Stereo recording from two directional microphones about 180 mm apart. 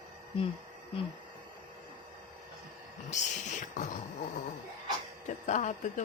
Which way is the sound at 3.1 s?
40° left (ahead or behind).